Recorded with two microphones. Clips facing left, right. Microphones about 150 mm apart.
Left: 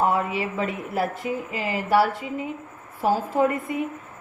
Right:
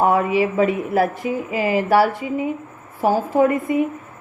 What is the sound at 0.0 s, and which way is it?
A woman's voice, 90° right.